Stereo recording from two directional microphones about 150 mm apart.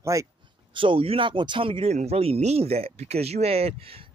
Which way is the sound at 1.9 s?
45° right (ahead or behind).